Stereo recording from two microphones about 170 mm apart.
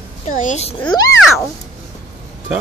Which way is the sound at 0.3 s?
45° left (ahead or behind).